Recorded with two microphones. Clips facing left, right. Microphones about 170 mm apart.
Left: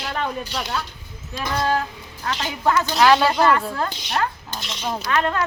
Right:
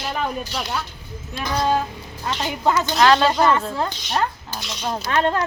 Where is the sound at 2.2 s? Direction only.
20° right (ahead or behind).